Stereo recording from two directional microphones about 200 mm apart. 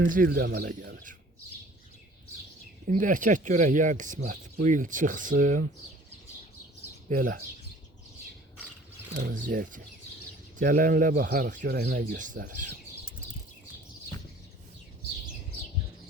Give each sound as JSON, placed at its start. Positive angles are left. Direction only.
{"t": 0.1, "sound": "speech", "side_deg": -45}
{"t": 2.8, "sound": "speech", "side_deg": -40}
{"t": 7.1, "sound": "speech", "side_deg": -45}
{"t": 9.3, "sound": "speech", "side_deg": -40}